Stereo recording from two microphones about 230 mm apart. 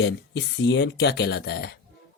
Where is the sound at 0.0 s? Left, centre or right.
Left.